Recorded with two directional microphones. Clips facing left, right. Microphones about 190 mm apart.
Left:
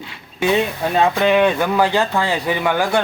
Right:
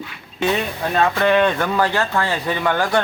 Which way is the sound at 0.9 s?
15° left (ahead or behind).